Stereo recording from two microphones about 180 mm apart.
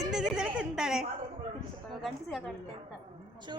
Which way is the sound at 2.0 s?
Centre (ahead or behind).